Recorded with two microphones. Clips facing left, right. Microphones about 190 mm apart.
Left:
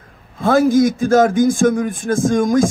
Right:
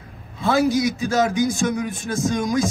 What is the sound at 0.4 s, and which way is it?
A man's voice, 50° left (ahead or behind).